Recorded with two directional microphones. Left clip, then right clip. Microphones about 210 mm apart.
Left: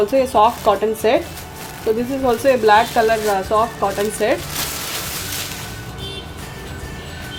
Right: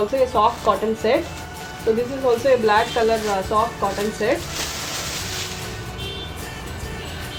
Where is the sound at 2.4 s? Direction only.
55° left (ahead or behind).